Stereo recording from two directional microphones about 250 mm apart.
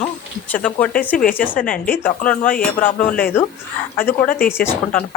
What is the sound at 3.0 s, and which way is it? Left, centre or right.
Speech, left.